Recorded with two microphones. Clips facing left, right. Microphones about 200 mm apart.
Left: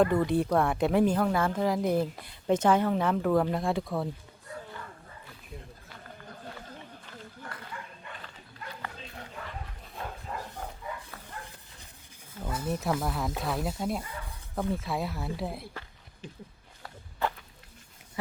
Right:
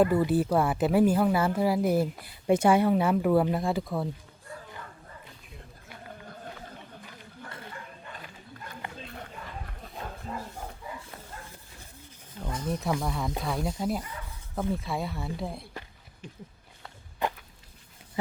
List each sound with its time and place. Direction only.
0.0 s speech: 5° right (ahead or behind)
12.4 s speech: 5° left (ahead or behind)
17.2 s a sound: 15° right (ahead or behind)